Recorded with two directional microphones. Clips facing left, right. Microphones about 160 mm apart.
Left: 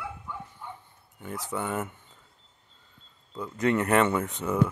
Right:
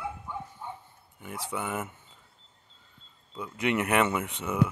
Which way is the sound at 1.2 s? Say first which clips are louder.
Left 2 dB; 20° right (ahead or behind).